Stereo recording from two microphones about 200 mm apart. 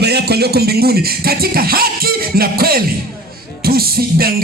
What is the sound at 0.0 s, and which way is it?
Music, 55° right (ahead or behind).